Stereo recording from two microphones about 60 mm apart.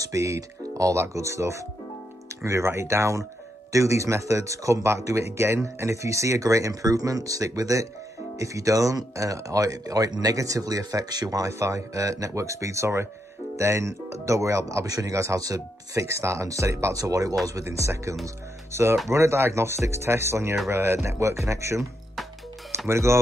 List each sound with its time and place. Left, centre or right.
0.0 s speech: right
14.9 s speech: right
17.6 s speech: right
22.8 s speech: right